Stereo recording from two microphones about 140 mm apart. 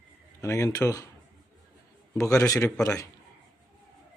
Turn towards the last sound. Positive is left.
turn(degrees=25)  # may be behind; listen again after turning